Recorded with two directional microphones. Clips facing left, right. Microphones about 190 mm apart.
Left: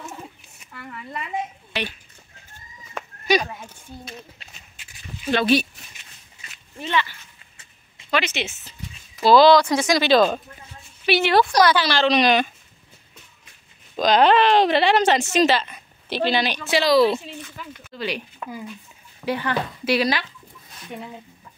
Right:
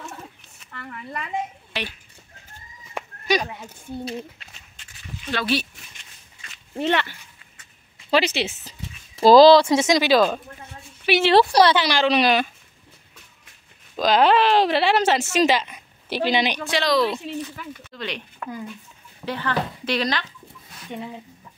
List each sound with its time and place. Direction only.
0.1 s a sound: 10° left (ahead or behind)
3.0 s a sound: 15° right (ahead or behind)
4.8 s a sound: 5° left (ahead or behind)
5.3 s speech: 20° left (ahead or behind)
6.8 s speech: 65° right (ahead or behind)
8.1 s speech: 35° right (ahead or behind)
10.0 s speech: 5° right (ahead or behind)
11.1 s speech: 30° right (ahead or behind); by 12.4 s 5° right (ahead or behind)
13.9 s a woman's voice: 5° right (ahead or behind)
16.6 s speech: 5° left (ahead or behind)